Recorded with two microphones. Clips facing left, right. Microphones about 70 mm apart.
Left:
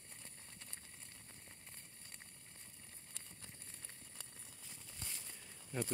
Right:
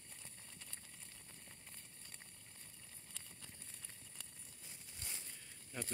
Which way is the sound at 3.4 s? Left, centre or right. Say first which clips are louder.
Left 1 dB; left.